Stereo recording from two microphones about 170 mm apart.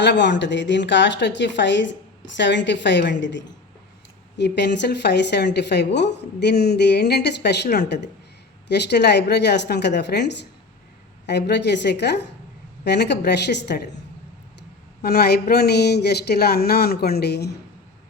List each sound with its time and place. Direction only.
0.0 s a woman's voice: 90° left
15.0 s speech: 65° left (ahead or behind)